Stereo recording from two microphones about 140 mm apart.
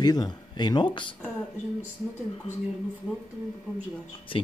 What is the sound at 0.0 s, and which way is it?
Speech, 30° left (ahead or behind).